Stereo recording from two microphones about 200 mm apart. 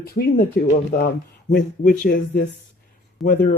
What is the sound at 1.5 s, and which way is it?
Speech, 45° left (ahead or behind).